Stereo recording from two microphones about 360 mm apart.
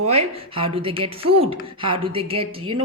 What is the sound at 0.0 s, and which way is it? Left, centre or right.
Speech, centre.